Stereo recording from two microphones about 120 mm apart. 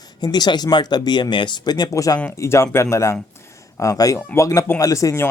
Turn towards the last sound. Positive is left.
turn(degrees=25)  # may be behind; listen again after turning